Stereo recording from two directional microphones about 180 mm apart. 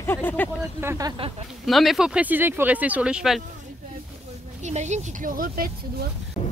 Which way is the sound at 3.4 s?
45° right (ahead or behind).